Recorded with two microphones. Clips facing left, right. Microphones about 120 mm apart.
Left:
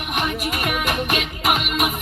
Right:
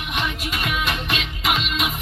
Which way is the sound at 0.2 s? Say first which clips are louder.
Left 3 dB; 45° left (ahead or behind).